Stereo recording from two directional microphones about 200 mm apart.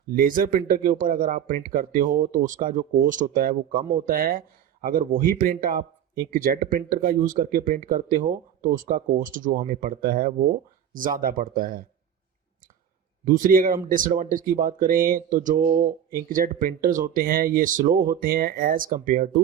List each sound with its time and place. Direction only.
0.1 s speech: 45° right (ahead or behind)
13.2 s speech: 40° right (ahead or behind)